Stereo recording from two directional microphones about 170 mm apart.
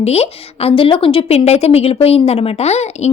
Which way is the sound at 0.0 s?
35° left (ahead or behind).